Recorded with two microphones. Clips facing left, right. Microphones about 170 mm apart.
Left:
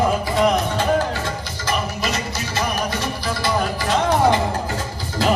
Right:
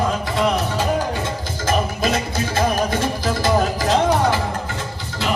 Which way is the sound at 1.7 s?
50° right (ahead or behind).